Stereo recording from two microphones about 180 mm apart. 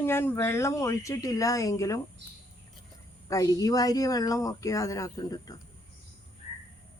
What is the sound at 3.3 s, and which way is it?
Speech, 20° left (ahead or behind).